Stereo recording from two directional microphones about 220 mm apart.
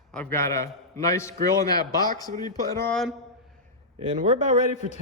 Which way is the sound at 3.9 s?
30° right (ahead or behind).